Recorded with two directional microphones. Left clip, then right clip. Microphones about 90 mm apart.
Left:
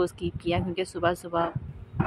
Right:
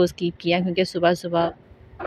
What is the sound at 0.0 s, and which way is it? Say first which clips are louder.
Speech: right 7 dB; 20° right (ahead or behind).